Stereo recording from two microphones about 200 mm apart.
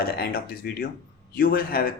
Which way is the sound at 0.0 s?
50° left (ahead or behind).